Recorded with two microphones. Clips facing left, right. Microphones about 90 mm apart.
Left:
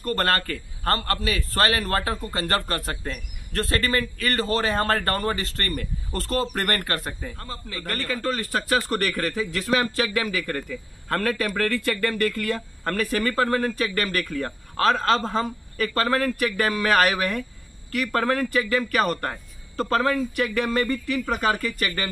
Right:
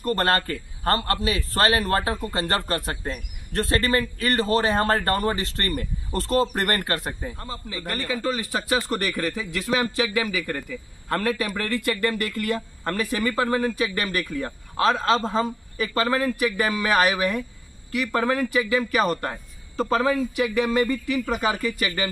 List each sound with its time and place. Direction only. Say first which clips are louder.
0.0 s speech: right 1 dB; 25° right (ahead or behind)